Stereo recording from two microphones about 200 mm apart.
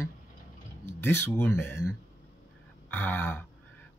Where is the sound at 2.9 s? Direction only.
10° left (ahead or behind).